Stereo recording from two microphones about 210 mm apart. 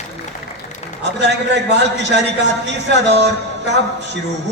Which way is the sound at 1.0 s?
55° right (ahead or behind).